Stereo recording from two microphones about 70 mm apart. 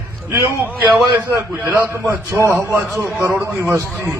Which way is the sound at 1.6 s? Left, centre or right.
Right.